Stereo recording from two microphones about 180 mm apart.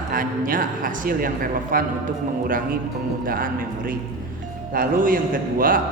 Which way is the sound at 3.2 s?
50° right (ahead or behind).